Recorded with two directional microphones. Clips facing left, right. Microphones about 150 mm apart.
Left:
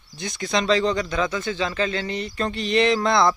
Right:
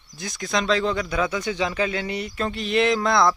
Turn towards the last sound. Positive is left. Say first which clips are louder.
# left 1 dB
turn(degrees=0)  # may be behind; listen again after turning